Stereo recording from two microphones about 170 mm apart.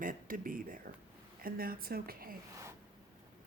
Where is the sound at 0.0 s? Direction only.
55° right (ahead or behind).